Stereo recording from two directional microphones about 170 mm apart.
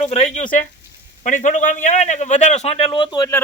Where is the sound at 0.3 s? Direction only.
50° left (ahead or behind).